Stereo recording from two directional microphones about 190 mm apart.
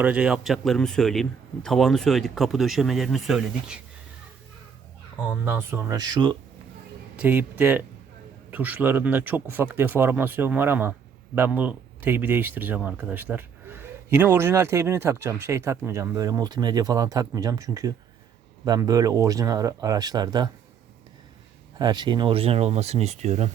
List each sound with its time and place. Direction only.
0.0 s speech: 5° right (ahead or behind)
5.2 s speech: 10° right (ahead or behind)
7.2 s speech: 10° right (ahead or behind)
21.8 s speech: 20° right (ahead or behind)